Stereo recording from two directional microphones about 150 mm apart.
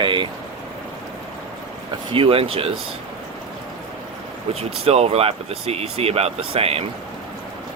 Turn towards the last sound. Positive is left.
turn(degrees=-40)  # may be behind; listen again after turning